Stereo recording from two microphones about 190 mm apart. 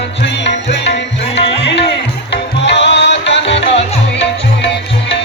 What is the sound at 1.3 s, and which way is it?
Music, 65° left (ahead or behind).